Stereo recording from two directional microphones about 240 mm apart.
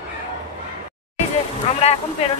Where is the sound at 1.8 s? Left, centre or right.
Left.